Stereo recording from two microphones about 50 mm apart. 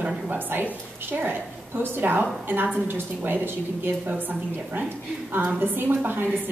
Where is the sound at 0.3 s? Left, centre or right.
Right.